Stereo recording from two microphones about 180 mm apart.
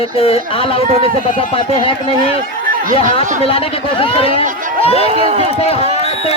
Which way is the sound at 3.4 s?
30° left (ahead or behind).